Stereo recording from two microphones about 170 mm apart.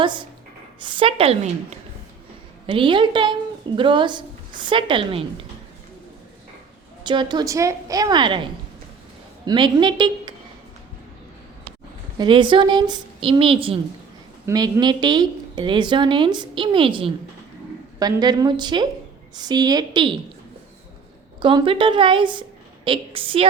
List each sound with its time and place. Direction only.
0.0 s a woman's voice: 30° right (ahead or behind)
7.0 s a woman's voice: 25° right (ahead or behind)
9.5 s a woman's voice: 25° right (ahead or behind)
12.1 s a woman's voice: 25° right (ahead or behind)
21.4 s a woman's voice: 30° right (ahead or behind)